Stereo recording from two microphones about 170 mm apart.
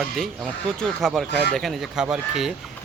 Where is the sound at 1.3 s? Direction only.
75° right (ahead or behind).